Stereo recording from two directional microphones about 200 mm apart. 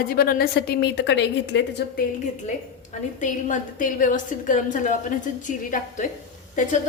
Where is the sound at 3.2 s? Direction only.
40° left (ahead or behind).